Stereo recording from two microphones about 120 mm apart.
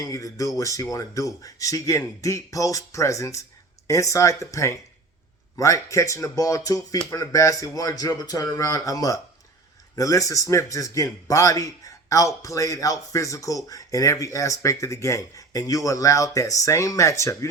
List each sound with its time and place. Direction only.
0.0 s a man's voice: 30° left (ahead or behind)